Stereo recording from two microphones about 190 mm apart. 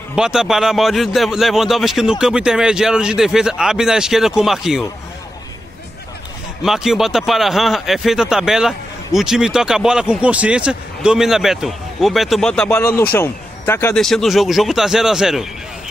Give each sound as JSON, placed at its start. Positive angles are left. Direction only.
{"t": 0.1, "sound": "speech", "side_deg": -5}
{"t": 6.6, "sound": "speech", "side_deg": 0}
{"t": 14.0, "sound": "speech", "side_deg": 0}